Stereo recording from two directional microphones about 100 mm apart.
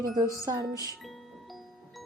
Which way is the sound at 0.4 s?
40° right (ahead or behind).